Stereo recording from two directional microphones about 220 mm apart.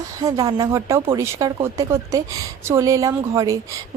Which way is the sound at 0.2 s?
15° right (ahead or behind).